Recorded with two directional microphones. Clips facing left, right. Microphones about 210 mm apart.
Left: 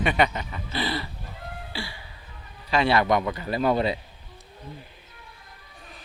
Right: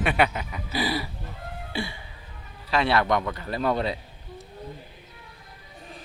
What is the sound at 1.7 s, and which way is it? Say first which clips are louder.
Music: right 6 dB; 20° right (ahead or behind).